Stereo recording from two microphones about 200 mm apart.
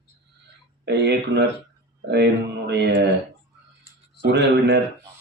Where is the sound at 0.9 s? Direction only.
55° right (ahead or behind).